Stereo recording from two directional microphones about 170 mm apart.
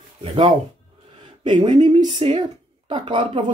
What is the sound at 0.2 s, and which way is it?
Speech, 35° right (ahead or behind).